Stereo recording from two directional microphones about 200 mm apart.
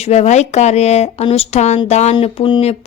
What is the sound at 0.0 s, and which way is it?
A woman's voice, 35° left (ahead or behind).